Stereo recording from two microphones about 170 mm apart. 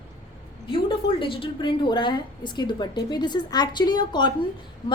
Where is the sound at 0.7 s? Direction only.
30° left (ahead or behind).